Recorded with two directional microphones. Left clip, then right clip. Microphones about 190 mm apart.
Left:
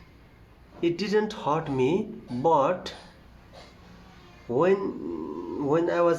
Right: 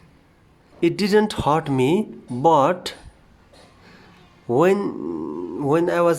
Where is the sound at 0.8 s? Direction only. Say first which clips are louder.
Right 7 dB; 45° right (ahead or behind).